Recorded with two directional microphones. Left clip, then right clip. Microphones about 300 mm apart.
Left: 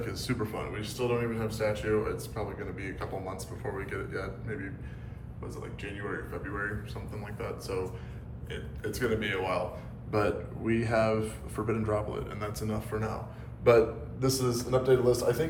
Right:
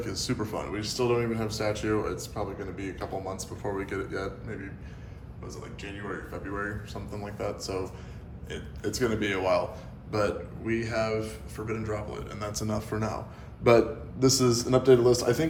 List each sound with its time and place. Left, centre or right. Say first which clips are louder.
0.0 s a man's voice: right 2 dB; centre
10.1 s a man's voice: right 1 dB; centre; by 15.4 s right